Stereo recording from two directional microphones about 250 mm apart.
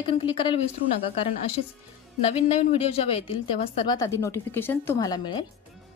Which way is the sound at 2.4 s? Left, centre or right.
Left.